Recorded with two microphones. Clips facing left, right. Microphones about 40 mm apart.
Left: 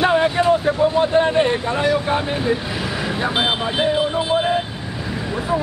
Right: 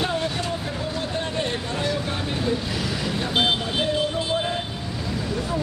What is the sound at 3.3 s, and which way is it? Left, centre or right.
Speech, centre.